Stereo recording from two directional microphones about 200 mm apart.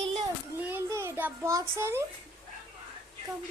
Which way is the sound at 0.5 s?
10° right (ahead or behind).